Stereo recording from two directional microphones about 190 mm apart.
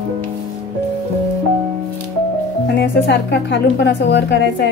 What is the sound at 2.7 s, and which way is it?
Speech, 65° left (ahead or behind).